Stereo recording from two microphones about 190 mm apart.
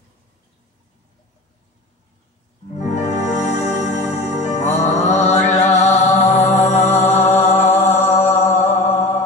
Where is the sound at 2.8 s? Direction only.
35° left (ahead or behind).